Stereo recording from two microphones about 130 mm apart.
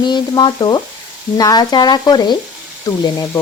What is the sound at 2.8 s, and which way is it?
Speech, 30° left (ahead or behind).